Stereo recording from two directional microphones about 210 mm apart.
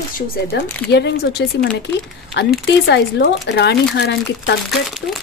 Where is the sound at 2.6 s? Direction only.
55° left (ahead or behind).